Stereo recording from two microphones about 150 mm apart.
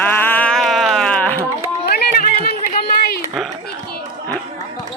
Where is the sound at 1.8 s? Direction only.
90° left.